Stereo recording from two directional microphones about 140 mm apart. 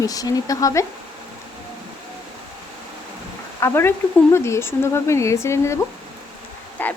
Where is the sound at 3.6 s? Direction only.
15° left (ahead or behind).